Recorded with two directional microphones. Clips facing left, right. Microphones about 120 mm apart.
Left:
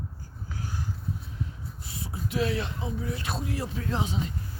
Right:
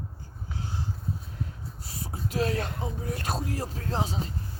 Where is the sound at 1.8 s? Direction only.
40° right (ahead or behind).